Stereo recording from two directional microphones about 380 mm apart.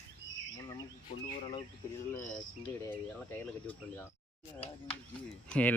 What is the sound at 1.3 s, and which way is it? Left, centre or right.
Speech, centre.